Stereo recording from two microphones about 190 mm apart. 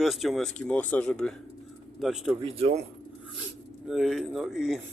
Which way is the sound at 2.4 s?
30° right (ahead or behind).